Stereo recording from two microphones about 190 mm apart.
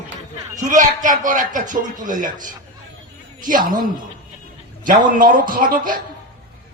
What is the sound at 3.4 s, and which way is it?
Speech, 45° right (ahead or behind).